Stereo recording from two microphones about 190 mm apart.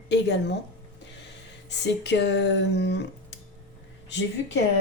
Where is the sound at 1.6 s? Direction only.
65° left (ahead or behind).